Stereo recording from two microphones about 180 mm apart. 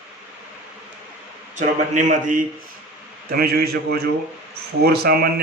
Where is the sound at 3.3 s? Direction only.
60° right (ahead or behind).